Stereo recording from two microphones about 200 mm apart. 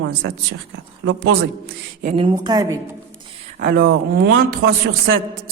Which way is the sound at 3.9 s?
60° right (ahead or behind).